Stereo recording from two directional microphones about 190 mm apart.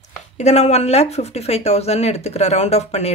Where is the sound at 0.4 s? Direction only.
35° left (ahead or behind).